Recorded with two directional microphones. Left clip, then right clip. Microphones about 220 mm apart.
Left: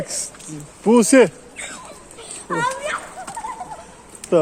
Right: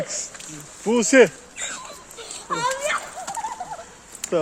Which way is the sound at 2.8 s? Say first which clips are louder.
Right 1 dB; 10° right (ahead or behind).